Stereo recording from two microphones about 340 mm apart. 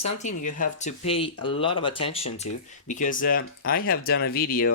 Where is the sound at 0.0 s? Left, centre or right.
Left.